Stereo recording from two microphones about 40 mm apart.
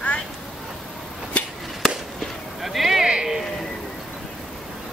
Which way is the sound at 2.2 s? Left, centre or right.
Centre.